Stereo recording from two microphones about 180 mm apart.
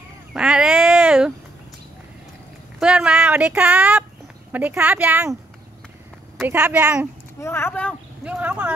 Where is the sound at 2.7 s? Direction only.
5° right (ahead or behind).